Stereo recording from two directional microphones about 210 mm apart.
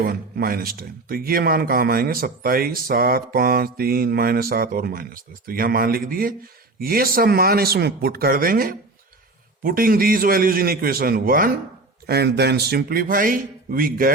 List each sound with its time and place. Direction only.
0.0 s speech: 45° right (ahead or behind)